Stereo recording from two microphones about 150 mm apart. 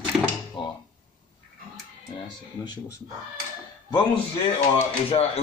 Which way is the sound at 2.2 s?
30° left (ahead or behind).